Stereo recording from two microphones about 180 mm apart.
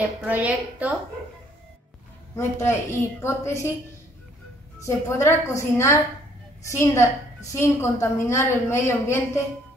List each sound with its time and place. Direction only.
0.2 s a woman's voice: 10° right (ahead or behind)
2.3 s a woman's voice: 15° left (ahead or behind)
4.8 s a woman's voice: 15° left (ahead or behind)